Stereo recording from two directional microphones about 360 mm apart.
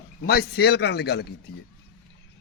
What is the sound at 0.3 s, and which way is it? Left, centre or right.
A man's voice, left.